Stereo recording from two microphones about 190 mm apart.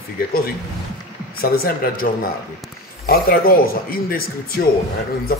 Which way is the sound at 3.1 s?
50° left (ahead or behind).